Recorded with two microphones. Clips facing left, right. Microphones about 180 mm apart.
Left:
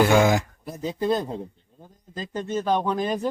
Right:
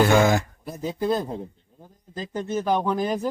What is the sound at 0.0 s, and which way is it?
Speech, 10° left (ahead or behind).